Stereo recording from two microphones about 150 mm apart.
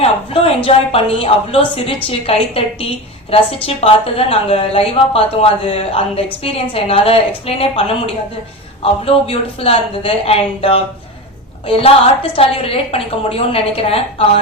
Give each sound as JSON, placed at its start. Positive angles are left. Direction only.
{"t": 0.0, "sound": "a woman's voice", "side_deg": 40}